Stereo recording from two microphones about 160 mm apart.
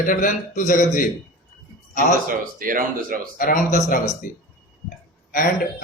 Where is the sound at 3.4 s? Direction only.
55° left (ahead or behind).